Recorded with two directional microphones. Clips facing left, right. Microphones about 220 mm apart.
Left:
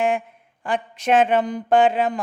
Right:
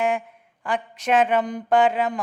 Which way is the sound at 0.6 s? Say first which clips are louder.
Left 2 dB; 25° left (ahead or behind).